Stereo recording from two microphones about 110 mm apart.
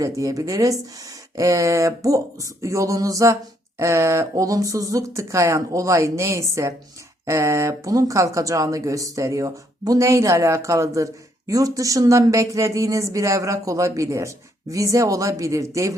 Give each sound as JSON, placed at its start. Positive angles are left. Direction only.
{"t": 0.0, "sound": "speech", "side_deg": -30}